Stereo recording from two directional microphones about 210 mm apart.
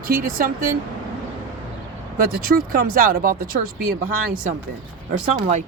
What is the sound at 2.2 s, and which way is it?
Speech, 45° right (ahead or behind).